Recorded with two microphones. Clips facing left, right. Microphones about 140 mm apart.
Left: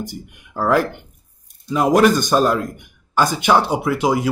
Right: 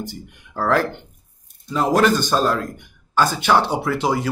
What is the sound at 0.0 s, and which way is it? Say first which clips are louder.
A man's voice: left 2 dB; 15° left (ahead or behind).